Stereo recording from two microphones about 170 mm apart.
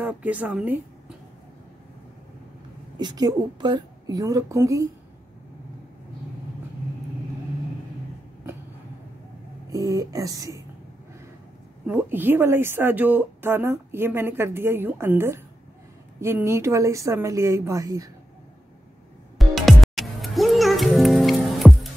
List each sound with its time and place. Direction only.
0.0 s a woman's voice: 10° right (ahead or behind)
3.0 s a woman's voice: 25° right (ahead or behind)
9.7 s a woman's voice: 20° right (ahead or behind)
11.8 s a woman's voice: 10° right (ahead or behind)
19.3 s music: centre (ahead or behind)